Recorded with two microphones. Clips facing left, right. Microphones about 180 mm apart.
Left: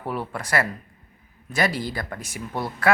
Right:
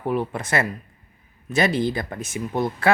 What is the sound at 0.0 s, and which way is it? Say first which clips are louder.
Speech: right 5 dB; 20° right (ahead or behind).